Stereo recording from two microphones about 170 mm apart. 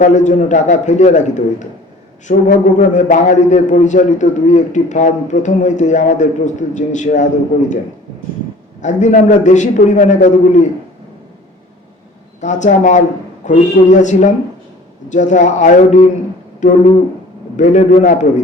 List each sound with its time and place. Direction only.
0.0 s a man's voice: 45° left (ahead or behind)
8.8 s a man's voice: 45° left (ahead or behind)
12.4 s a man's voice: 45° left (ahead or behind)